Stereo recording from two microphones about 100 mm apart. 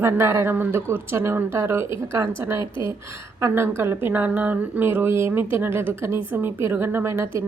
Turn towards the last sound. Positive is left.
turn(degrees=-25)  # may be behind; listen again after turning